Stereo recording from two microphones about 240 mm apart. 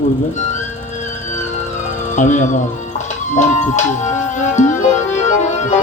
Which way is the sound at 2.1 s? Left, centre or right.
Left.